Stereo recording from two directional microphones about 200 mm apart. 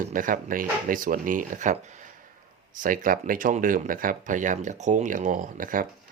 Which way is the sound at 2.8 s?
45° right (ahead or behind).